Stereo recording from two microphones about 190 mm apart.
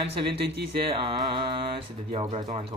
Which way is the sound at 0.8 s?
25° right (ahead or behind).